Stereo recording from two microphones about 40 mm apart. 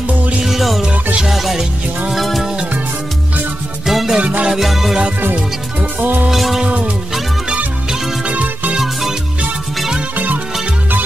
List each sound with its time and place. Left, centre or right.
0.4 s music: centre
3.8 s music: centre
4.2 s music: right
4.5 s music: centre
5.3 s music: right
6.3 s music: centre
6.6 s music: right
8.2 s music: right
8.7 s music: centre
10.1 s music: right